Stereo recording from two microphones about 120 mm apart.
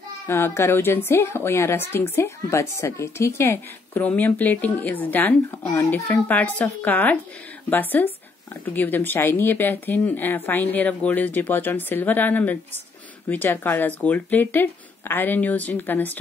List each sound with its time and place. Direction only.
0.3 s a woman's voice: 20° left (ahead or behind)